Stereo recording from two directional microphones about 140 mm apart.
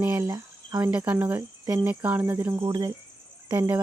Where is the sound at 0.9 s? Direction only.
10° right (ahead or behind).